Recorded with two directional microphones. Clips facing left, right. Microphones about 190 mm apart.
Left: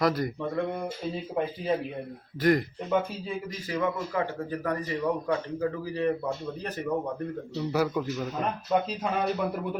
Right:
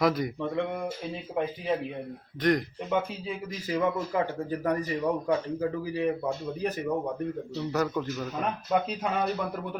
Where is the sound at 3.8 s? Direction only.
20° right (ahead or behind).